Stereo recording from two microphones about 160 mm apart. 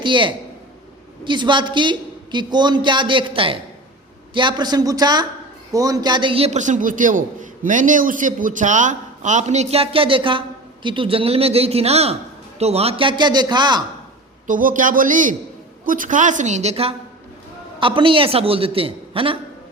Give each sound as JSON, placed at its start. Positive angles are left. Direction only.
{"t": 0.0, "sound": "a man's voice", "side_deg": -30}
{"t": 14.4, "sound": "a man's voice", "side_deg": -55}